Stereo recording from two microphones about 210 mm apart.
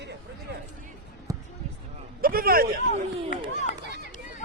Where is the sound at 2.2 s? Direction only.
45° right (ahead or behind).